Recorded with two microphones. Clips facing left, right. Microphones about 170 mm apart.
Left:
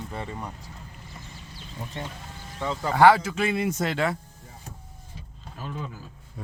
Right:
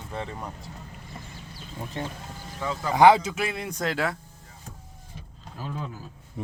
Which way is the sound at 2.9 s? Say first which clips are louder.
Right 1 dB; 15° right (ahead or behind).